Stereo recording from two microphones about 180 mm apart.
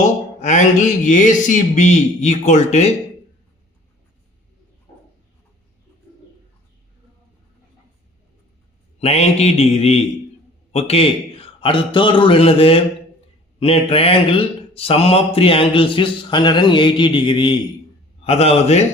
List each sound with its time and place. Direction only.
0.0 s speech: 45° left (ahead or behind)
9.0 s mantra: 35° left (ahead or behind)
10.7 s a man's voice: 35° left (ahead or behind)
18.2 s mantra: 35° left (ahead or behind)